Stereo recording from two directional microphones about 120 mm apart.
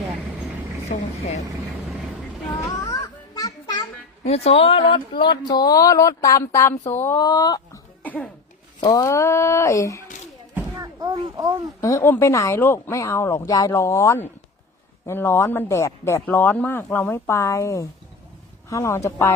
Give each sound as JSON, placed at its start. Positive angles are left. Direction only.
{"t": 0.9, "sound": "speech", "side_deg": 90}
{"t": 2.5, "sound": "children playing", "side_deg": 35}
{"t": 4.2, "sound": "speech", "side_deg": 60}
{"t": 7.2, "sound": "speech", "side_deg": 30}
{"t": 8.0, "sound": "speech", "side_deg": 15}
{"t": 8.8, "sound": "speech", "side_deg": 30}
{"t": 10.8, "sound": "a sound", "side_deg": -35}
{"t": 11.3, "sound": "speech", "side_deg": -30}
{"t": 11.8, "sound": "speech", "side_deg": 25}